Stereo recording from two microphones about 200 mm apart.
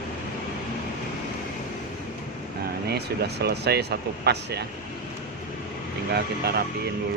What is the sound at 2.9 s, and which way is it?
Speech, 55° right (ahead or behind).